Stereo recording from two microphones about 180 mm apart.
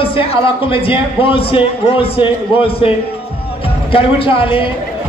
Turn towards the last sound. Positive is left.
turn(degrees=30)  # may be behind; listen again after turning